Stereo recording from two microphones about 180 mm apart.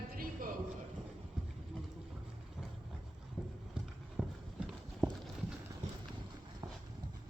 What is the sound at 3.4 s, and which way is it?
Clip-clop, 5° right (ahead or behind).